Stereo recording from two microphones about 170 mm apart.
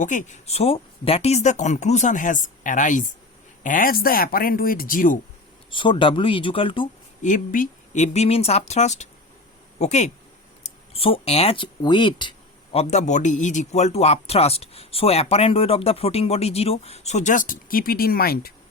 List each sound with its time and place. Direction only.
0.0 s speech: 45° left (ahead or behind)
5.7 s a man's voice: 30° left (ahead or behind)
7.2 s a man's voice: 45° left (ahead or behind); by 12.3 s 30° left (ahead or behind)
12.7 s a man's voice: 40° left (ahead or behind); by 18.5 s 60° left (ahead or behind)